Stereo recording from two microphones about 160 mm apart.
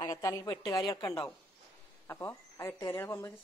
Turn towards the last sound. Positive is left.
turn(degrees=15)  # may be behind; listen again after turning